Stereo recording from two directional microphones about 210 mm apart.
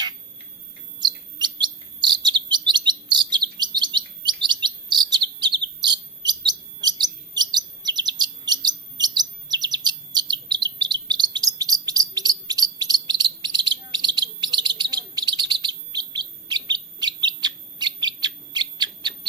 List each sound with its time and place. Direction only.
1.0 s chirp: 20° right (ahead or behind)
17.4 s bird: 20° right (ahead or behind)